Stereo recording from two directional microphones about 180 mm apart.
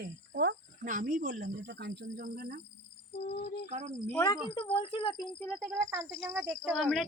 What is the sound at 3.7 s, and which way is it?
Speech, 40° right (ahead or behind).